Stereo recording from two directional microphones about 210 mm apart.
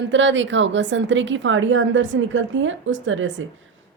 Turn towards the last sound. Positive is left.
turn(degrees=-65)  # may be behind; listen again after turning